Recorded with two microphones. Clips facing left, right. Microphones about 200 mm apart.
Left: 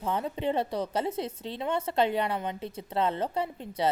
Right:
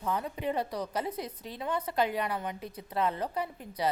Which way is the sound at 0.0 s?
25° left (ahead or behind).